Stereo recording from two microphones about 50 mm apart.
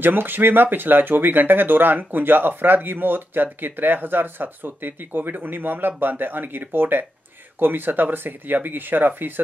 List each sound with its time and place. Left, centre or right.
0.0 s speech: right